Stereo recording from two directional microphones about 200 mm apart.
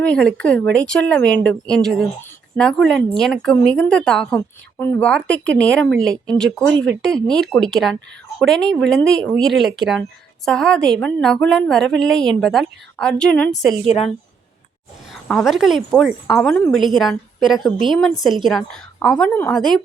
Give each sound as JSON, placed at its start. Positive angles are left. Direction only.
{"t": 0.0, "sound": "a woman's voice", "side_deg": 5}
{"t": 13.8, "sound": "a woman's voice", "side_deg": 30}
{"t": 15.1, "sound": "a woman's voice", "side_deg": 0}